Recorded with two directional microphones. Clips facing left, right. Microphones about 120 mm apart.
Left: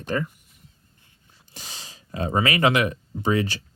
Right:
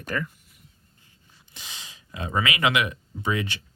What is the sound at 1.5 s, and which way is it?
Speech, 35° left (ahead or behind).